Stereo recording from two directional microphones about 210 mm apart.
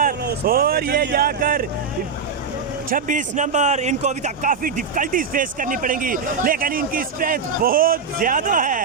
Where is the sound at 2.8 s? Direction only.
40° right (ahead or behind).